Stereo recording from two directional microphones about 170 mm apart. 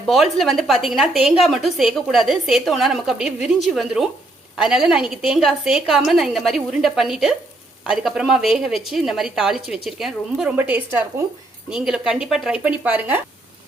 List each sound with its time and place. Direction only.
0.1 s a woman's voice: centre (ahead or behind)